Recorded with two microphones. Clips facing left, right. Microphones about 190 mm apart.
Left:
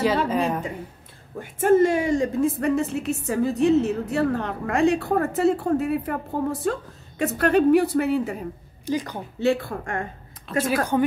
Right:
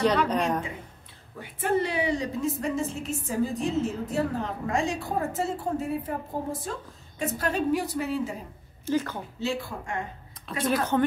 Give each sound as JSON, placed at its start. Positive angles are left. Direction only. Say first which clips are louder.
{"t": 0.0, "sound": "a sound", "louder": "left 2 dB", "side_deg": 5}
{"t": 1.4, "sound": "a woman's voice", "louder": "left 9 dB", "side_deg": 45}
{"t": 8.8, "sound": "a woman's voice", "louder": "left 1 dB", "side_deg": 15}
{"t": 9.4, "sound": "a woman's voice", "louder": "left 9 dB", "side_deg": 55}
{"t": 10.5, "sound": "speech", "louder": "left 9 dB", "side_deg": 0}